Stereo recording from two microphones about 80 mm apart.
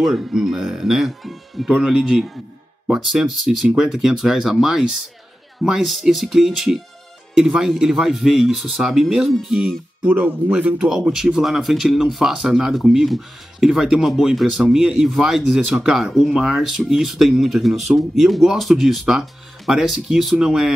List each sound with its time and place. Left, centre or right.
0.0 s speech: centre
10.9 s speech: centre